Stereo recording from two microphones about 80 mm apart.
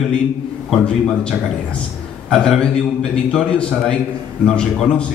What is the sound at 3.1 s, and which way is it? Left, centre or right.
A man's voice, centre.